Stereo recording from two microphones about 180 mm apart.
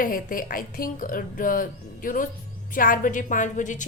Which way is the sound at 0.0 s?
50° left (ahead or behind).